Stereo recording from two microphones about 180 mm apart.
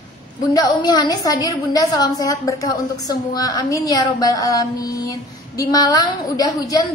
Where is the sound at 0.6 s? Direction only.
25° left (ahead or behind).